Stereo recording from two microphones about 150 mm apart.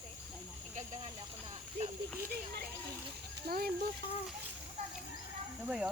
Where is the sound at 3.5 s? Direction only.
90° right.